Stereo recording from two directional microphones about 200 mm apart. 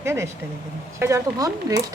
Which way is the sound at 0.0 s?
15° right (ahead or behind).